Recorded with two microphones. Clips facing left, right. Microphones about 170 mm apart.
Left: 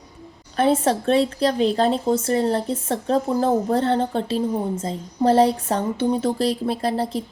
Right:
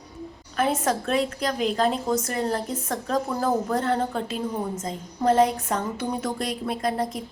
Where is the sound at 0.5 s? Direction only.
30° left (ahead or behind).